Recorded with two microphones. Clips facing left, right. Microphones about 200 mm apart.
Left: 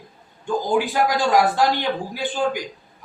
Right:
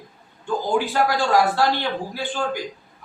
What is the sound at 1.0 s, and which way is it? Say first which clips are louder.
A man's voice: left 1 dB; 15° left (ahead or behind).